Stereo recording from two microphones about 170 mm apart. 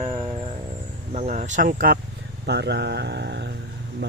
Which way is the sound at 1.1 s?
45° right (ahead or behind).